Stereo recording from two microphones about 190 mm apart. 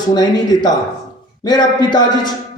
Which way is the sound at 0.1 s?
20° left (ahead or behind).